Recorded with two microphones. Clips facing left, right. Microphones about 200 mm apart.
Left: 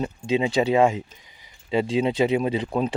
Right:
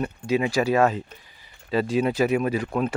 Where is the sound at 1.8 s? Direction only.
20° left (ahead or behind).